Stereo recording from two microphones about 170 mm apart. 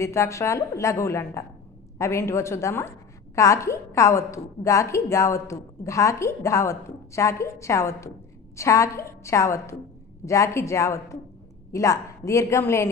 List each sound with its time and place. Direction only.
0.0 s a woman's voice: 15° left (ahead or behind)